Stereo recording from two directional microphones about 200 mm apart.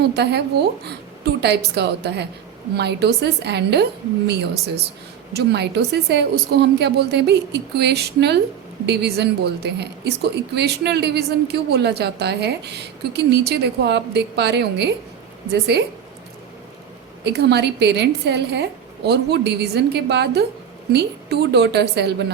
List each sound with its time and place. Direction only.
0.0 s a woman's voice: 55° right (ahead or behind)
5.3 s a woman's voice: 55° right (ahead or behind)
17.2 s a woman's voice: 55° right (ahead or behind)